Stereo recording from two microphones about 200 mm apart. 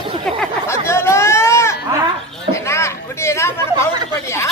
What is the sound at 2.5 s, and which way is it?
Chatter, 15° left (ahead or behind).